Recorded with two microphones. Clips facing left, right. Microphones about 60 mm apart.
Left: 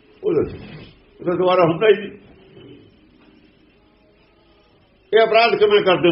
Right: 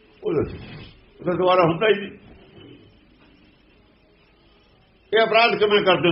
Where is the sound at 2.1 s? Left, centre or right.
Left.